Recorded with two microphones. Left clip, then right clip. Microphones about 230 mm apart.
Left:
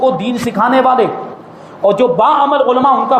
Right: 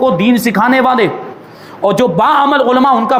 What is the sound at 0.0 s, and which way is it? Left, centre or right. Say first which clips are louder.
A man's voice: right 2 dB; right.